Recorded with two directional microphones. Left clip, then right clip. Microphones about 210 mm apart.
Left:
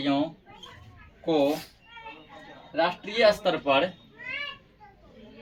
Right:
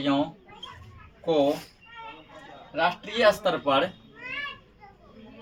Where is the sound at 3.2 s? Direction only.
15° right (ahead or behind).